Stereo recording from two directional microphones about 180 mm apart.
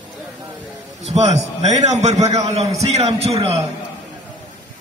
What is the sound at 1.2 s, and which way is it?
A man's voice, 40° right (ahead or behind).